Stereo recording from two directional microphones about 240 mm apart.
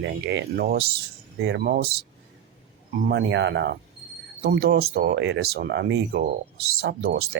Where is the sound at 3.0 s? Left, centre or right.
Right.